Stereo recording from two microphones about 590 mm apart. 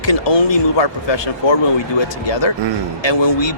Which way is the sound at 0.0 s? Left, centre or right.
Left.